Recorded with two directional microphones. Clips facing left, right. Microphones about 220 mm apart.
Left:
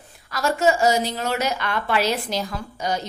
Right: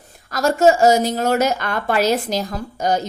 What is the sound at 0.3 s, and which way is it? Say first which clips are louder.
Speech: right 6 dB; 45° right (ahead or behind).